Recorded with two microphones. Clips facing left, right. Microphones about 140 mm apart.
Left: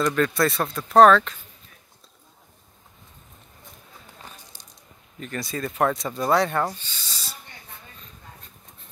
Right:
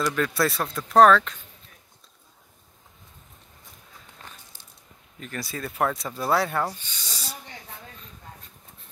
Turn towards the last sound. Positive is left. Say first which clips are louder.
# right 2 dB
turn(degrees=-15)  # may be behind; listen again after turning